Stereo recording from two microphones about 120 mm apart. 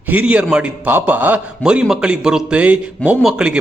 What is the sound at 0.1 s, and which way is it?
A man's voice, 10° right (ahead or behind).